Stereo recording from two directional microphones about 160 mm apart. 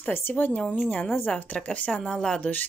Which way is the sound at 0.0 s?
10° left (ahead or behind).